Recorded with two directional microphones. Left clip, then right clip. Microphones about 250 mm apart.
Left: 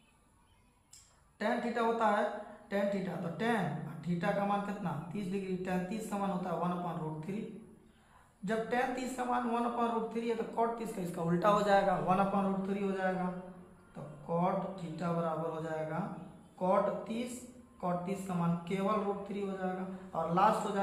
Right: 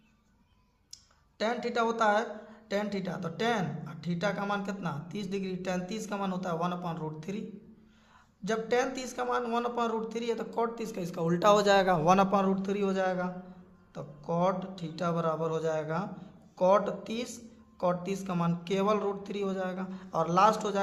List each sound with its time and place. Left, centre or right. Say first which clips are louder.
1.4 s a man's voice: right 3 dB; right
8.4 s a man's voice: right 4 dB; right
13.9 s music: right 3 dB; right
14.9 s a man's voice: right 5 dB; right